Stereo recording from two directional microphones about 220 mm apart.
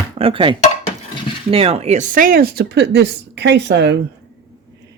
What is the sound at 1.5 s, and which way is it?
Speech, 25° right (ahead or behind).